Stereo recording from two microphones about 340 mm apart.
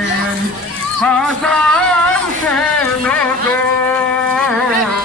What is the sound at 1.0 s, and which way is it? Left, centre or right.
Music, centre.